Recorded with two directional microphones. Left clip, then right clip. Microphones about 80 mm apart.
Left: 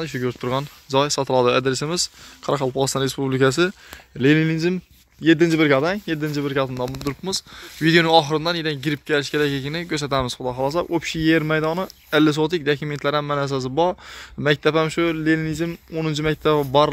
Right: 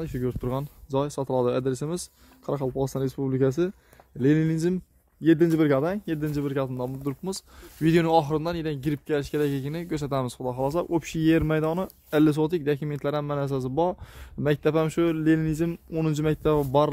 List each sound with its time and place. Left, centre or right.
0.0 s a man's voice: right; by 4.6 s centre
5.2 s speech: right
6.4 s speech: centre
7.8 s a man's voice: centre
10.7 s speech: right; by 13.9 s centre
14.4 s speech: right
14.9 s speech: right
16.3 s speech: right